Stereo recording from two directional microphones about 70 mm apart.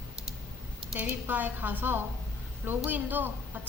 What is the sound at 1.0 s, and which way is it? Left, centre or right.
A woman's voice, right.